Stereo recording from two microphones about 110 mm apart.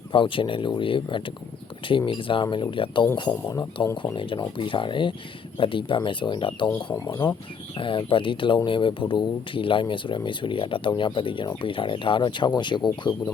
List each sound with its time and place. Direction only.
0.1 s speech: 50° left (ahead or behind)
3.4 s speech: 30° left (ahead or behind)
4.1 s speech: 45° left (ahead or behind)
7.8 s speech: 50° left (ahead or behind)